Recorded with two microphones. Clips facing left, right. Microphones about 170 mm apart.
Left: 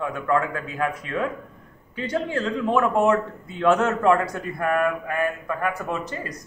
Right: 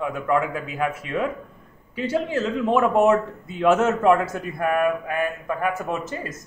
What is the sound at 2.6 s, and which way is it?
Speech, 20° right (ahead or behind).